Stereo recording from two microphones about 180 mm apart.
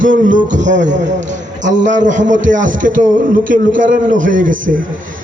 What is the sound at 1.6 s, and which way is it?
Speech, 90° right.